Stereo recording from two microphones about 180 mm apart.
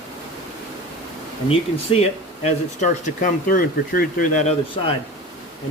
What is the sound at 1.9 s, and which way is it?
Speech, 30° left (ahead or behind).